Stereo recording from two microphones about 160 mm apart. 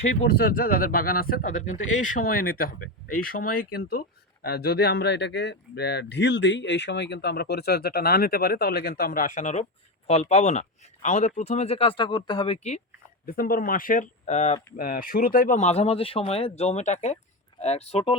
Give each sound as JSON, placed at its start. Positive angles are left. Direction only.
{"t": 0.3, "sound": "speech", "side_deg": 65}
{"t": 4.4, "sound": "speech", "side_deg": 90}
{"t": 13.2, "sound": "speech", "side_deg": 65}
{"t": 14.8, "sound": "speech", "side_deg": 60}